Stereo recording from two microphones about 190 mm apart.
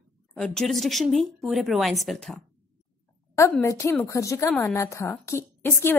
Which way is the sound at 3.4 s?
15° left (ahead or behind).